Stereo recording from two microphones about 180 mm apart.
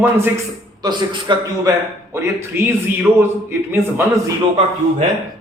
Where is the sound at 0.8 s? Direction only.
25° right (ahead or behind).